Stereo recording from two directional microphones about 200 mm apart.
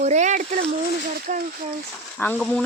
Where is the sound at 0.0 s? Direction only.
35° right (ahead or behind).